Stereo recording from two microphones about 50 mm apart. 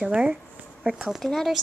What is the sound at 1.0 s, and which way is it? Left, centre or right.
Speech, centre.